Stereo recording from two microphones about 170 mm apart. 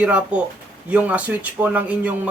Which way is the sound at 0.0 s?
5° right (ahead or behind).